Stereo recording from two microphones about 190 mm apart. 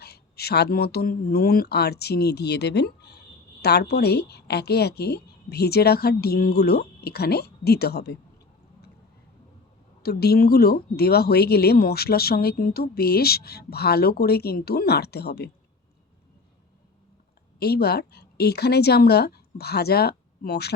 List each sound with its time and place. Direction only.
0.0 s speech: 55° left (ahead or behind)
10.0 s speech: 55° left (ahead or behind)
17.6 s speech: 55° left (ahead or behind)